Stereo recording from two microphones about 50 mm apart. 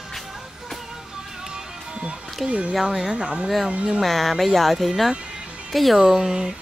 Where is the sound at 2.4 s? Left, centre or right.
Right.